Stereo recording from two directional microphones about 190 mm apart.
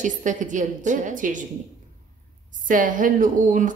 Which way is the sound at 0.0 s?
40° right (ahead or behind).